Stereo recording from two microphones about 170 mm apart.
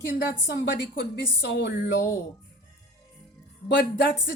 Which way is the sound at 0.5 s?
80° left.